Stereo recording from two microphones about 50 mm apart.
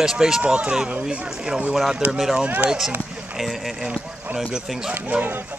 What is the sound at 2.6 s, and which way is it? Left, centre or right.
Speech, centre.